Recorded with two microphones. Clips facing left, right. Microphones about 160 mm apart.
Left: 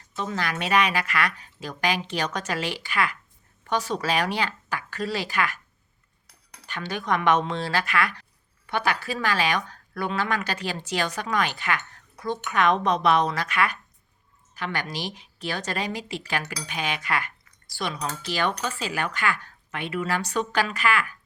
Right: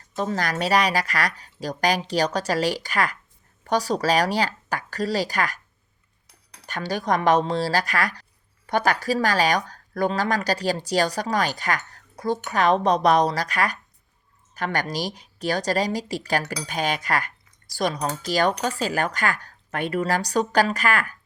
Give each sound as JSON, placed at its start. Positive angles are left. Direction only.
{"t": 0.2, "sound": "speech", "side_deg": -40}
{"t": 6.7, "sound": "speech", "side_deg": -40}